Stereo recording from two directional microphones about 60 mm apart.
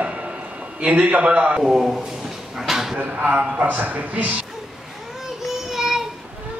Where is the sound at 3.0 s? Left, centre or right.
Right.